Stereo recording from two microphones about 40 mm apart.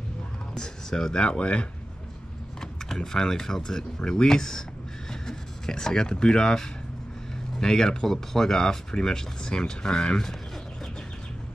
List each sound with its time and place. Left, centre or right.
0.6 s speech: centre
2.6 s speech: centre